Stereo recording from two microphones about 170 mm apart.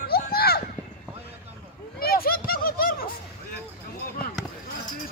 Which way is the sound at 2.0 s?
60° left (ahead or behind).